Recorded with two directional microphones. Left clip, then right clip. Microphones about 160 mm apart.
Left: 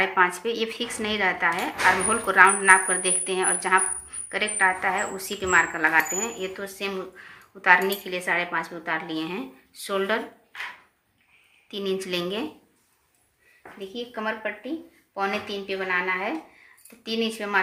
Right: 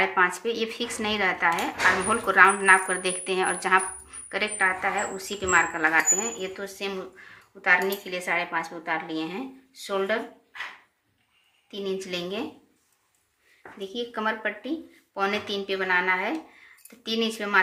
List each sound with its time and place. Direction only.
0.0 s speech: 5° left (ahead or behind); by 10.2 s 25° left (ahead or behind)
11.7 s speech: 25° left (ahead or behind)
13.6 s speech: 15° right (ahead or behind)